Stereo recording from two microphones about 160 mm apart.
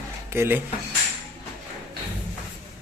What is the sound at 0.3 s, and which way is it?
Speech, 15° right (ahead or behind).